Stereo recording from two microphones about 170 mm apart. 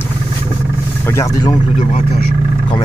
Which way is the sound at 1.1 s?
20° left (ahead or behind).